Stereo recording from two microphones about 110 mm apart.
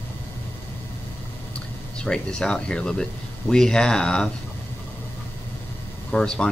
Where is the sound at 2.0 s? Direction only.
10° left (ahead or behind).